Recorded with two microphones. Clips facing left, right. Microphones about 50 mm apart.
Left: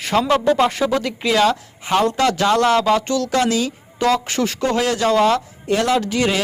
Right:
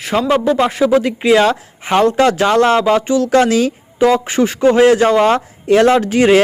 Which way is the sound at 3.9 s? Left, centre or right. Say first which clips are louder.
Right 5 dB; right.